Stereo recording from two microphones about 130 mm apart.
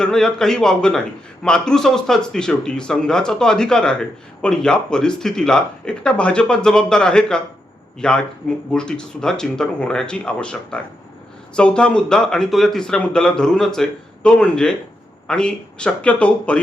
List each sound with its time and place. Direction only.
0.0 s speech: 5° left (ahead or behind)